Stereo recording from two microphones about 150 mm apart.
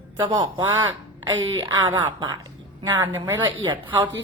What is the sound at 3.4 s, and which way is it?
Speech, 30° right (ahead or behind).